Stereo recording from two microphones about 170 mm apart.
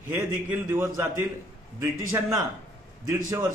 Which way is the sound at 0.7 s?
15° right (ahead or behind).